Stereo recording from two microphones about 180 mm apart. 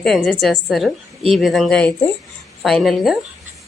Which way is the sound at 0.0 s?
Centre (ahead or behind).